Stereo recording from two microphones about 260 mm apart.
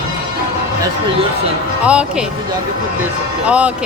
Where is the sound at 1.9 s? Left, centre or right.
Centre.